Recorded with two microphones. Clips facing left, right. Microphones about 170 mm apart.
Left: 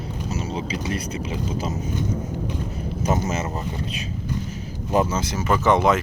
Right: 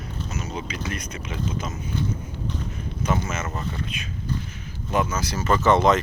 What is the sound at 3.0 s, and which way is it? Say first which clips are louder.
Speech: left 3 dB; 35° left (ahead or behind).